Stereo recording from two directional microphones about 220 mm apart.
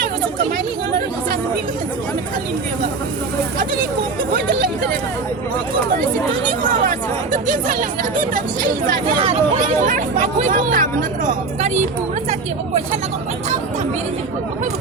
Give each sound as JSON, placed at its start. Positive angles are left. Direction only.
{"t": 4.4, "sound": "speech", "side_deg": -40}
{"t": 6.6, "sound": "speech", "side_deg": -35}